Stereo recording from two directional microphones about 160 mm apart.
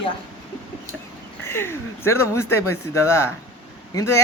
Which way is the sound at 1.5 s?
15° left (ahead or behind).